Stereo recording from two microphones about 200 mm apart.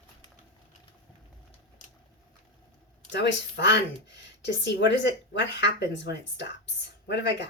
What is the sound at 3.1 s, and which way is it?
Speech, 60° left (ahead or behind).